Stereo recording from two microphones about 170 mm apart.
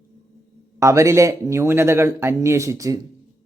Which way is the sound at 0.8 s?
15° right (ahead or behind).